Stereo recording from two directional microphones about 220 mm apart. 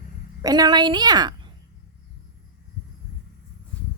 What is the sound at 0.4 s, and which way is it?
A woman's voice, 20° right (ahead or behind).